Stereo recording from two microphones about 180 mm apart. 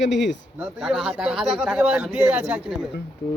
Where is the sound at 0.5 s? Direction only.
5° right (ahead or behind).